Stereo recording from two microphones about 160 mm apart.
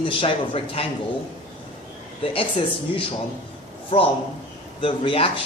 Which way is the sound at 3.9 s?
35° left (ahead or behind).